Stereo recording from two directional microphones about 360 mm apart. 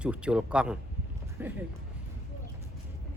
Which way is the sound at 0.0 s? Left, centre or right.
Centre.